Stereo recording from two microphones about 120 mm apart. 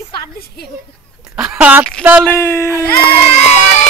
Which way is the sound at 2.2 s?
20° left (ahead or behind).